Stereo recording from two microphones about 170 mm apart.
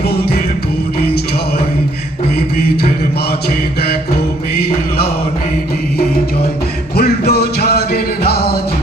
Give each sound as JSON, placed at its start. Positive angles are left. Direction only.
{"t": 6.9, "sound": "music", "side_deg": 65}